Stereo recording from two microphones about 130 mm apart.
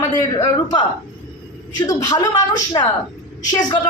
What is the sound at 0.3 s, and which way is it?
Speech, 30° left (ahead or behind).